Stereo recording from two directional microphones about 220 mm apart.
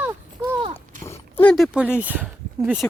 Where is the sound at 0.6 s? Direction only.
30° right (ahead or behind).